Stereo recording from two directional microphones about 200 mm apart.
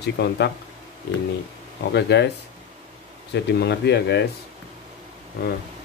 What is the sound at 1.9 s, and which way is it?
Speech, 60° left (ahead or behind).